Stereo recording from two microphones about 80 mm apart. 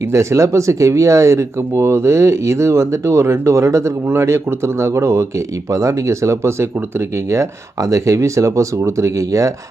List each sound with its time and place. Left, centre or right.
0.1 s speech: right